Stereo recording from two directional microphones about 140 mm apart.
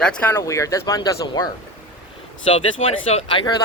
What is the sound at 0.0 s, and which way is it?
Speech, 10° left (ahead or behind).